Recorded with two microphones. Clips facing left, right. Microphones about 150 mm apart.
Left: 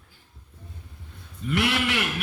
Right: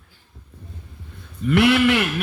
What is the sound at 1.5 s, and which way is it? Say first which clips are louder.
Speech: right 9 dB; 65° right (ahead or behind).